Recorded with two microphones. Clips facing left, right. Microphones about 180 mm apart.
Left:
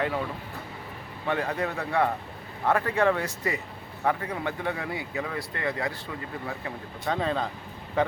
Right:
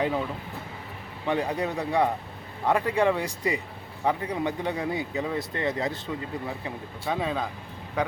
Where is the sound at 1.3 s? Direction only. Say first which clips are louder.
Right 2 dB; 15° right (ahead or behind).